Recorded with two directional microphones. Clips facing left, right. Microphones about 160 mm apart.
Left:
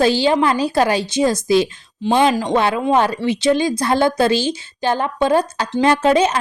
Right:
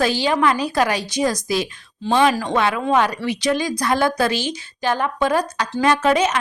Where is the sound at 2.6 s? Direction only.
30° left (ahead or behind).